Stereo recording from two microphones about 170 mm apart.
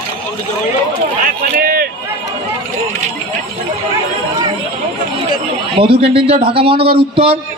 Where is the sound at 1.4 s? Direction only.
55° right (ahead or behind).